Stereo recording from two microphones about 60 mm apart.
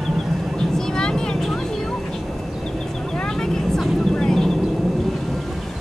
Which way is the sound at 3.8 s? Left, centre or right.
Centre.